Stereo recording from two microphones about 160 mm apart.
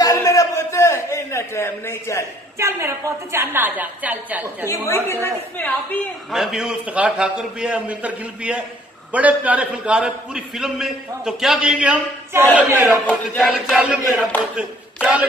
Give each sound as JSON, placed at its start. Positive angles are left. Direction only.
{"t": 0.0, "sound": "a sound", "side_deg": 20}
{"t": 2.6, "sound": "a man's voice", "side_deg": -15}
{"t": 4.6, "sound": "a woman's voice", "side_deg": 15}
{"t": 6.3, "sound": "a man's voice", "side_deg": 0}
{"t": 14.5, "sound": "clapping", "side_deg": -5}